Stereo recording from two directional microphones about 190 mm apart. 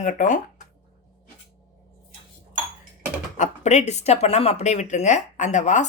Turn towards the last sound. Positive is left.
turn(degrees=40)  # may be behind; listen again after turning